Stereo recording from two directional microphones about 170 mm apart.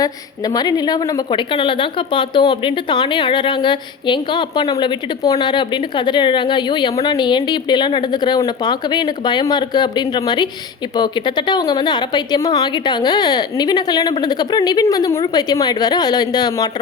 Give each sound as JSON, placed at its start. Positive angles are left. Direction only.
{"t": 0.0, "sound": "a woman's voice", "side_deg": 20}